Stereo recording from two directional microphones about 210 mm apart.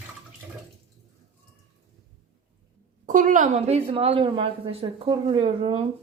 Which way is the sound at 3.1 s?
40° right (ahead or behind).